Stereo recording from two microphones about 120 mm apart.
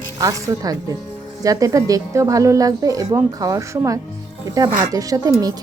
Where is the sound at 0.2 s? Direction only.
30° right (ahead or behind).